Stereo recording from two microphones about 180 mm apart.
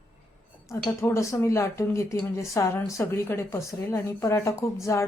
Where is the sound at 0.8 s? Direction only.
15° left (ahead or behind).